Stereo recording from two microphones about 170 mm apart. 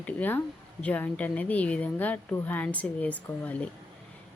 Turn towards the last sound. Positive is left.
turn(degrees=10)  # may be behind; listen again after turning